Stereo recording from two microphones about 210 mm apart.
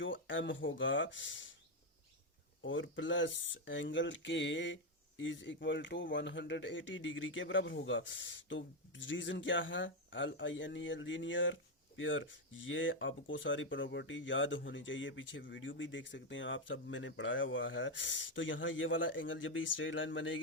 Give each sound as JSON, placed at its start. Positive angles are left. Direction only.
{"t": 0.0, "sound": "speech", "side_deg": 65}
{"t": 2.6, "sound": "speech", "side_deg": 60}